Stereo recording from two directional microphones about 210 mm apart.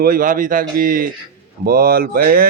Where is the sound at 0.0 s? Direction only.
40° right (ahead or behind).